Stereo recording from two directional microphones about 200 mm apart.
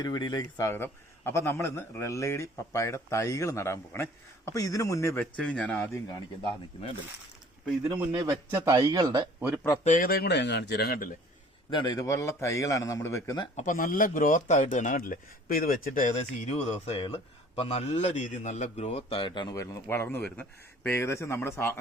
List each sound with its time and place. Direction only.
0.0 s a man's voice: 20° left (ahead or behind)
7.9 s a man's voice: 20° right (ahead or behind)
9.8 s speech: 40° left (ahead or behind)
11.7 s a man's voice: 20° left (ahead or behind)
13.6 s a man's voice: 40° left (ahead or behind); by 21.8 s 10° left (ahead or behind)